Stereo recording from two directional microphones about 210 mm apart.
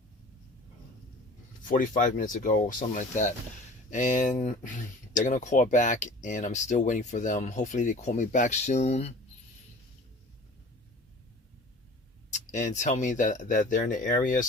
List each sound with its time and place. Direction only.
1.6 s speech: 40° left (ahead or behind)
12.3 s speech: 35° left (ahead or behind)